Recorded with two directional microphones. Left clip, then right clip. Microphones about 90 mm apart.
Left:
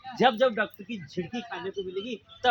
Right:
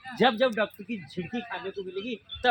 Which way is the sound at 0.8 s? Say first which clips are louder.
Right 1 dB; 10° left (ahead or behind).